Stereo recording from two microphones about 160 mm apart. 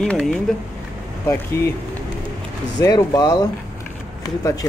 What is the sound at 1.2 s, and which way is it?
Speech, 15° left (ahead or behind).